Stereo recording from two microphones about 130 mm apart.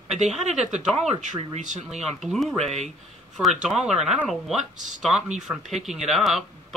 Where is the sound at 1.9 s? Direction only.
Centre (ahead or behind).